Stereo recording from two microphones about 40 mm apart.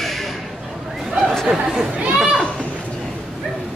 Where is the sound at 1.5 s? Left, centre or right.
Centre.